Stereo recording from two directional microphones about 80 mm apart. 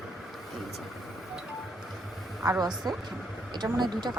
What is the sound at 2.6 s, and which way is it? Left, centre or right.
A woman's voice, right.